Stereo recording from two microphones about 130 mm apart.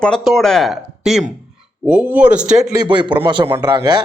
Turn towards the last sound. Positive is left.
turn(degrees=-30)  # may be behind; listen again after turning